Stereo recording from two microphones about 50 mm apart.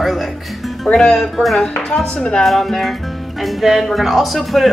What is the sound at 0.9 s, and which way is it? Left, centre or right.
Speech, centre.